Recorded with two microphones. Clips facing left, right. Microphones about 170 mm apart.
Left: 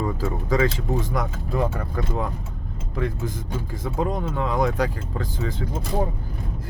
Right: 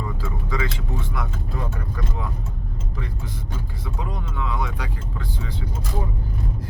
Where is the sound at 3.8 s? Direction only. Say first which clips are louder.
Left 9 dB; 45° left (ahead or behind).